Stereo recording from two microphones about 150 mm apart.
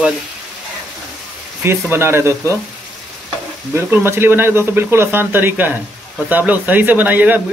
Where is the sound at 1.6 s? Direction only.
15° right (ahead or behind).